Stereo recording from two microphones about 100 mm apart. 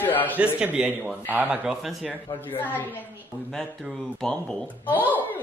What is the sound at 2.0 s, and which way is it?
Speech, 15° left (ahead or behind).